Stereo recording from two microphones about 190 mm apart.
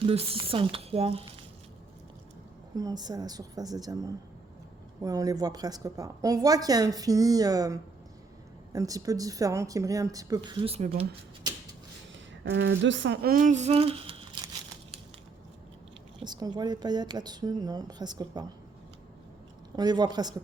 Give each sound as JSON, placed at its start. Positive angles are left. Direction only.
{"t": 0.0, "sound": "a woman's voice", "side_deg": -30}
{"t": 2.7, "sound": "a woman's voice", "side_deg": -20}
{"t": 12.5, "sound": "speech", "side_deg": -65}
{"t": 13.3, "sound": "speech", "side_deg": -40}
{"t": 16.2, "sound": "a woman's voice", "side_deg": -20}
{"t": 19.7, "sound": "a woman's voice", "side_deg": -20}